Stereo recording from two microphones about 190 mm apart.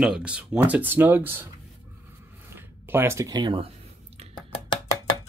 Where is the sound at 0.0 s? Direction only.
5° right (ahead or behind).